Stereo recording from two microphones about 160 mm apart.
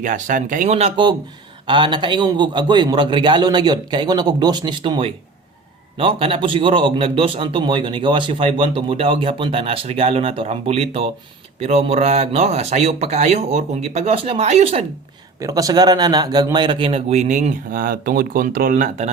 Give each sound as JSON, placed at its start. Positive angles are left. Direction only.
{"t": 0.0, "sound": "speech", "side_deg": -55}
{"t": 1.6, "sound": "a man's voice", "side_deg": -30}
{"t": 15.4, "sound": "a man's voice", "side_deg": -20}